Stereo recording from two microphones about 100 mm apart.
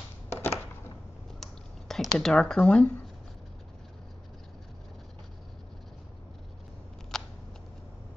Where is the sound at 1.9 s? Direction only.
5° left (ahead or behind).